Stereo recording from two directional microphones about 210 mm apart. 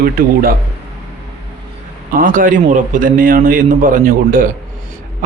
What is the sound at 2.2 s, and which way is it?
A man's voice, 40° right (ahead or behind).